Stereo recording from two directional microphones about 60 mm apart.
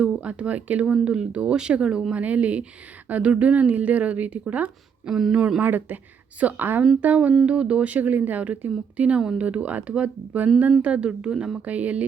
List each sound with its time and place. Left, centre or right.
0.2 s a woman's voice: right
2.1 s a woman's voice: right
5.0 s speech: centre
5.5 s speech: right
7.0 s a woman's voice: right
11.6 s a woman's voice: right